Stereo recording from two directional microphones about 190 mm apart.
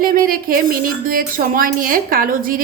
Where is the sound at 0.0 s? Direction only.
50° right (ahead or behind).